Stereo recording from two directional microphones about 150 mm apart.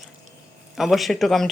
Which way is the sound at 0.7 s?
Centre (ahead or behind).